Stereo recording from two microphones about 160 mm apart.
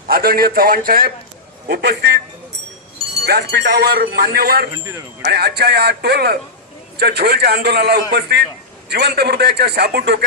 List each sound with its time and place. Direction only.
0.1 s speech: 70° right (ahead or behind)
1.6 s a man's voice: 80° right
3.2 s speech: 90° right; by 4.6 s 75° right (ahead or behind)
4.7 s speech: 20° right (ahead or behind)
5.2 s a man's voice: 90° right